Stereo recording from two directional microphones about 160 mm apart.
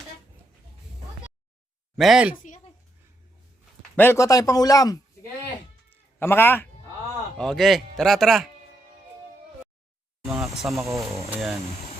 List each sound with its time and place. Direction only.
2.0 s speech: 5° right (ahead or behind)
2.3 s speech: 50° left (ahead or behind)
3.9 s speech: 15° left (ahead or behind)
5.9 s cat: 15° left (ahead or behind)
7.3 s speech: centre (ahead or behind)
10.2 s speech: 5° right (ahead or behind)
10.8 s speech: 20° right (ahead or behind)